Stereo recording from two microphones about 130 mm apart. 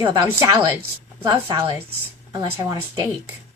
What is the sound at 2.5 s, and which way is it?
Speech, 30° right (ahead or behind).